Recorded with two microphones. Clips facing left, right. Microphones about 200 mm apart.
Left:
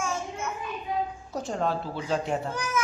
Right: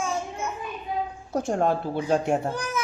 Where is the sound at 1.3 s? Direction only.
55° right (ahead or behind).